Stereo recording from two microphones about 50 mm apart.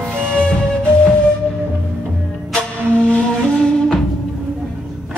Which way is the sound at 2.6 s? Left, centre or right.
Left.